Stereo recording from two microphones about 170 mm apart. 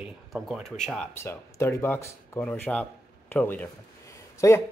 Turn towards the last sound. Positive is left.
turn(degrees=15)  # may be behind; listen again after turning